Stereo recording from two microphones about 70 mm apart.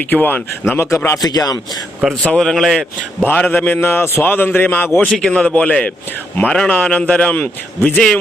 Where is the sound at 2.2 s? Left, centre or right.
Centre.